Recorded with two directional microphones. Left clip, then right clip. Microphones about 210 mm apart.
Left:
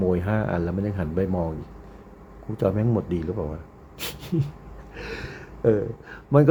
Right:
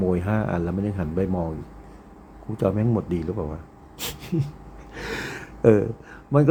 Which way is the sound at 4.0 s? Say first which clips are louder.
Even; centre (ahead or behind).